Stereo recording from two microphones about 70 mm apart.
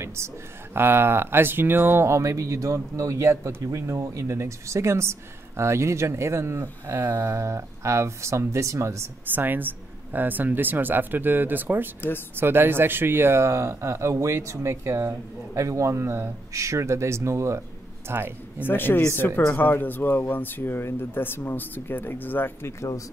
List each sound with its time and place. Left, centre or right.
0.0 s a sound: right
0.7 s speech: right
9.3 s speech: right
18.0 s speech: right
18.7 s speech: left